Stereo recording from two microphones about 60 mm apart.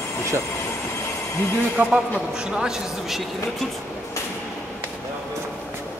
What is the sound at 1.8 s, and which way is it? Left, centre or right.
Speech, right.